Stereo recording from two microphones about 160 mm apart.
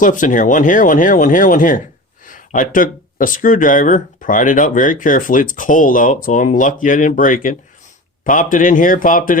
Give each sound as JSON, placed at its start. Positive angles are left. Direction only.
{"t": 0.0, "sound": "speech", "side_deg": 55}